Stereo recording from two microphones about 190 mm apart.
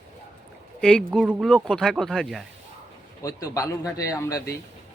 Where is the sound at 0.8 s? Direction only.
Centre (ahead or behind).